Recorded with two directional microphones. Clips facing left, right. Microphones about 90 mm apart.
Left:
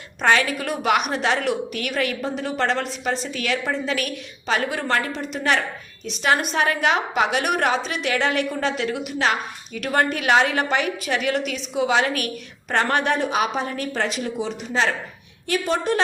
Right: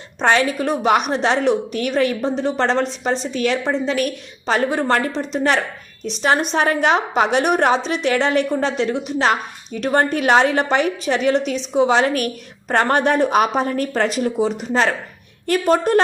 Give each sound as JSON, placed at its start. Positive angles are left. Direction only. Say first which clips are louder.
{"t": 0.2, "sound": "a woman's voice", "louder": "right 3 dB", "side_deg": -30}